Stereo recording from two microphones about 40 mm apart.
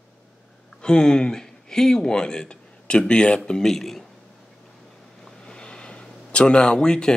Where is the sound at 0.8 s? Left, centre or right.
Centre.